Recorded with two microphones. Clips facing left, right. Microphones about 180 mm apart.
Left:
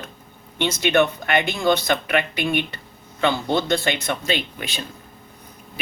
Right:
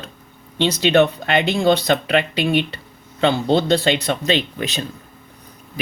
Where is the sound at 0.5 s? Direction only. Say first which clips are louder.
Right 4 dB; 30° right (ahead or behind).